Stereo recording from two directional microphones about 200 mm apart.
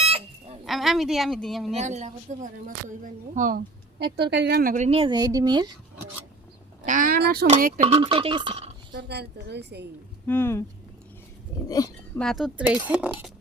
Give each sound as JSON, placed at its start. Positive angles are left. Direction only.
{"t": 0.6, "sound": "speech", "side_deg": 0}
{"t": 1.7, "sound": "speech", "side_deg": -35}
{"t": 4.0, "sound": "a woman's voice", "side_deg": -55}
{"t": 4.7, "sound": "a woman's voice", "side_deg": -35}
{"t": 6.8, "sound": "speech", "side_deg": -40}
{"t": 7.8, "sound": "a woman's voice", "side_deg": -30}
{"t": 8.9, "sound": "a woman's voice", "side_deg": -55}
{"t": 10.2, "sound": "speech", "side_deg": 10}
{"t": 11.7, "sound": "speech", "side_deg": 20}
{"t": 12.2, "sound": "speech", "side_deg": 0}